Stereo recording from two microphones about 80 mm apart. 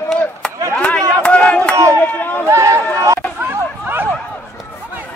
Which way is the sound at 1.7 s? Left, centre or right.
Right.